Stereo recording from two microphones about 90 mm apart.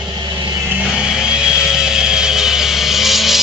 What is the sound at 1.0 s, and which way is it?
Vehicle, 10° right (ahead or behind).